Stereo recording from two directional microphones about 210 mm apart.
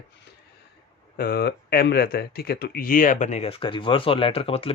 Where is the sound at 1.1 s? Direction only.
50° left (ahead or behind).